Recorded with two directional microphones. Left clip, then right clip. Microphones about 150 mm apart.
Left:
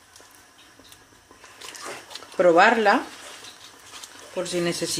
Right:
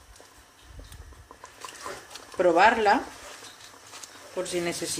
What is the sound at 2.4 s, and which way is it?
Speech, 50° left (ahead or behind).